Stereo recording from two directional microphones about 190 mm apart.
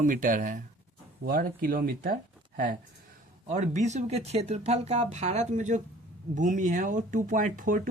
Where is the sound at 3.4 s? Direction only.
40° right (ahead or behind).